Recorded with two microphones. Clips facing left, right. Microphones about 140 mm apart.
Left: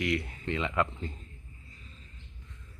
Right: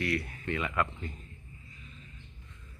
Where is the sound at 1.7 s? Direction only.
35° left (ahead or behind).